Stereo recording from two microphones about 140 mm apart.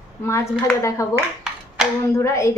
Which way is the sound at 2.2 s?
20° left (ahead or behind).